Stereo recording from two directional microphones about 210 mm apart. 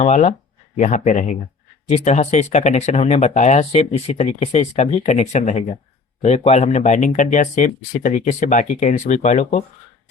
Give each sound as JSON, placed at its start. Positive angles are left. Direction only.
{"t": 0.0, "sound": "speech", "side_deg": 30}